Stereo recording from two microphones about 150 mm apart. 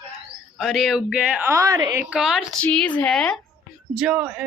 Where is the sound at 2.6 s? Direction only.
10° left (ahead or behind); by 4.4 s 10° right (ahead or behind).